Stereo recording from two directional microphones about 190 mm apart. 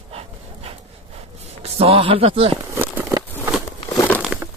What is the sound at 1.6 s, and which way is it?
Speech, 30° right (ahead or behind).